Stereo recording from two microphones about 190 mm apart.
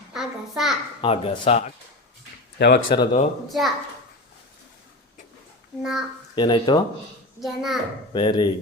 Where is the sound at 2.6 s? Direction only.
60° left (ahead or behind).